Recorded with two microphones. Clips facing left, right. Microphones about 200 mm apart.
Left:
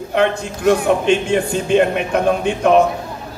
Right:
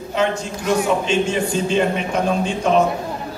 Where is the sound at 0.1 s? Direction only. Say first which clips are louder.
Left 3 dB; 60° left (ahead or behind).